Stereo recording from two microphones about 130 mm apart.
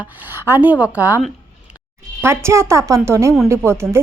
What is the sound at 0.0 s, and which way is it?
A woman's voice, 15° right (ahead or behind).